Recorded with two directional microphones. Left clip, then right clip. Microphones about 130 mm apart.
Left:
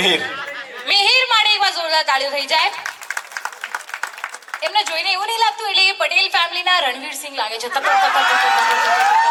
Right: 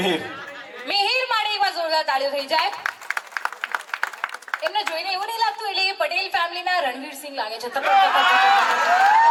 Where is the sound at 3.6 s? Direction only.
20° right (ahead or behind).